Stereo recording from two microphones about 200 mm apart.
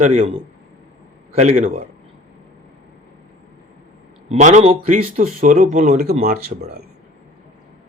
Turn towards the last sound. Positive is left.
turn(degrees=-45)  # may be behind; listen again after turning